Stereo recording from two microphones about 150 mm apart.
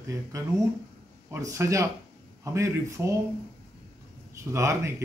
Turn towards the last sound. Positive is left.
turn(degrees=-20)  # may be behind; listen again after turning